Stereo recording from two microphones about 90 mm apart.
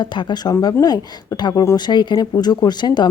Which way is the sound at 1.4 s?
50° left (ahead or behind).